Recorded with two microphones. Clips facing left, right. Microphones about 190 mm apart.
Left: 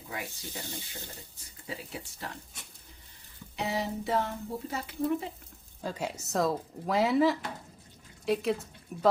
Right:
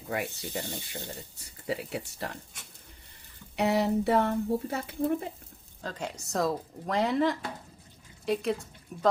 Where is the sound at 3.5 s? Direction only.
65° right (ahead or behind).